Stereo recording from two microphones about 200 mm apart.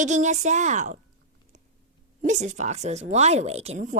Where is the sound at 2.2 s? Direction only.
35° right (ahead or behind).